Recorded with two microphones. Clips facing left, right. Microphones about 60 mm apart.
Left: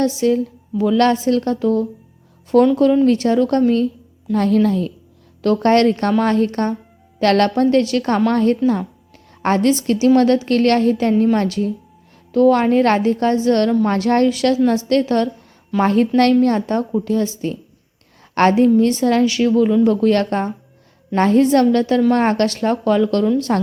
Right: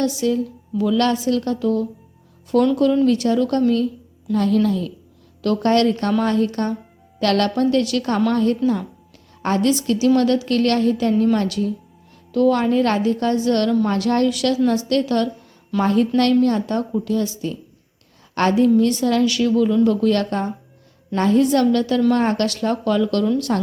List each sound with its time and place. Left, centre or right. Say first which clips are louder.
0.0 s a woman's voice: left 3 dB; left